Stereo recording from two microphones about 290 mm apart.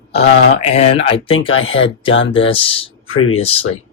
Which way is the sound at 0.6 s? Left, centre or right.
Left.